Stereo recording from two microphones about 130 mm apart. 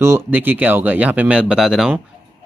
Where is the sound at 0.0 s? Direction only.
20° right (ahead or behind); by 2.0 s 5° right (ahead or behind).